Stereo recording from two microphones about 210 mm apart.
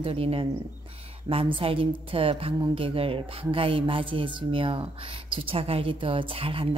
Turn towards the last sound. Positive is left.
turn(degrees=-25)  # may be behind; listen again after turning